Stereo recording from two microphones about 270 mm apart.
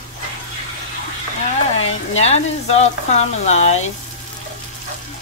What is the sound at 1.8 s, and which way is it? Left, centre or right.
Speech, left.